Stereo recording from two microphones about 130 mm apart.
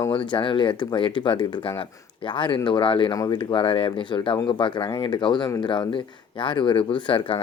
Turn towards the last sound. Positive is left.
turn(degrees=40)  # may be behind; listen again after turning